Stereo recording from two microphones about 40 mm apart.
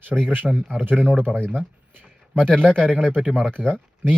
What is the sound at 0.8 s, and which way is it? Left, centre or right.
Speech, right.